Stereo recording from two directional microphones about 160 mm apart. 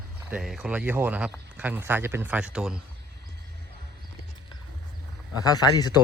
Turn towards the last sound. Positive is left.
turn(degrees=25)  # may be behind; listen again after turning